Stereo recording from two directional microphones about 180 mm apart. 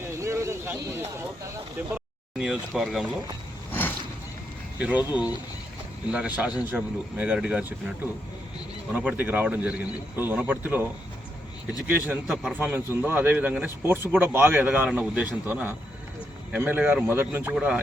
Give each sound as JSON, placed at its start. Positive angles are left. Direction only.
{"t": 0.0, "sound": "a sound", "side_deg": -15}
{"t": 2.4, "sound": "a sound", "side_deg": -5}
{"t": 3.7, "sound": "vehicle", "side_deg": 10}
{"t": 4.8, "sound": "speech", "side_deg": -5}
{"t": 8.9, "sound": "speech", "side_deg": -10}
{"t": 11.9, "sound": "speech", "side_deg": -10}